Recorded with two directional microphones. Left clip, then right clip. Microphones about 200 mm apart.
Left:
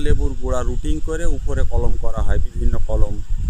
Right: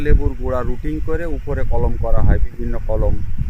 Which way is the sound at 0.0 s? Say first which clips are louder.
Right 3 dB; 5° left (ahead or behind).